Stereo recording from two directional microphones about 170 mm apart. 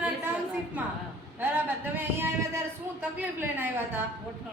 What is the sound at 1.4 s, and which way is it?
A man's voice, 10° right (ahead or behind).